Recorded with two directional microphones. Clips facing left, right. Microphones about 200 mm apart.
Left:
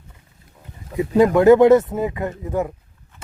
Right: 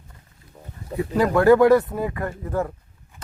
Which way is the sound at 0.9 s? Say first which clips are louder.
Left 5 dB; 20° left (ahead or behind).